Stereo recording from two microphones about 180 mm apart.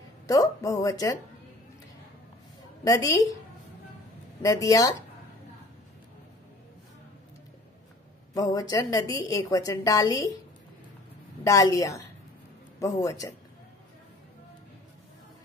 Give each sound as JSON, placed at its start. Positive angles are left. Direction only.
{"t": 0.3, "sound": "a woman's voice", "side_deg": 20}
{"t": 2.8, "sound": "a woman's voice", "side_deg": 20}
{"t": 4.4, "sound": "speech", "side_deg": 20}
{"t": 8.4, "sound": "a woman's voice", "side_deg": 20}
{"t": 11.4, "sound": "a woman's voice", "side_deg": 20}